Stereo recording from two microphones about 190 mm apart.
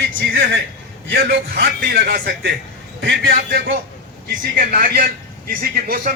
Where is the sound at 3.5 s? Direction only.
55° right (ahead or behind).